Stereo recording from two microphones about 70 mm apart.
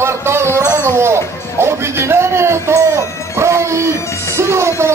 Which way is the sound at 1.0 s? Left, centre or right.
Right.